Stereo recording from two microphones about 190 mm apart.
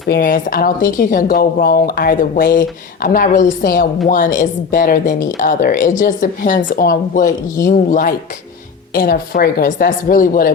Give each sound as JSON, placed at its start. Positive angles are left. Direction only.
{"t": 0.1, "sound": "speech", "side_deg": 50}